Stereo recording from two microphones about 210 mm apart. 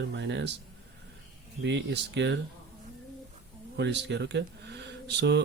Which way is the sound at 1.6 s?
55° right (ahead or behind).